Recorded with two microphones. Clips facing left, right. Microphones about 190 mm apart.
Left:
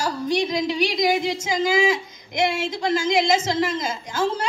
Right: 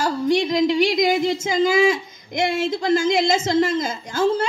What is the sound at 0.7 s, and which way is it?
Speech, 55° right (ahead or behind).